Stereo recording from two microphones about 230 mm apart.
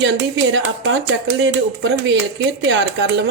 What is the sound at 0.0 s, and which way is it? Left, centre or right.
Speech, right.